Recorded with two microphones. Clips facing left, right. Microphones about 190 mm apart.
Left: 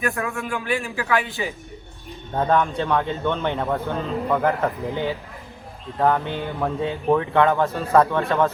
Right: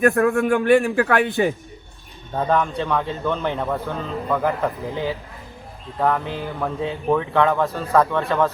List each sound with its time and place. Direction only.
0.0 s a man's voice: 60° right (ahead or behind)
2.4 s speech: centre (ahead or behind)